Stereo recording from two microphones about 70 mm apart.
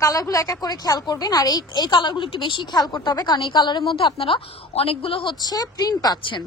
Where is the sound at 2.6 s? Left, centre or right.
Left.